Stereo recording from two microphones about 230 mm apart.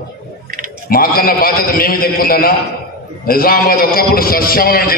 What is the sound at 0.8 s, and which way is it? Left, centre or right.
A man's voice, left.